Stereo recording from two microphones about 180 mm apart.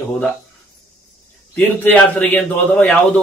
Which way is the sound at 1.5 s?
10° left (ahead or behind).